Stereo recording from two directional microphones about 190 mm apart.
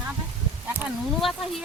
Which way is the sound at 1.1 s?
Centre (ahead or behind).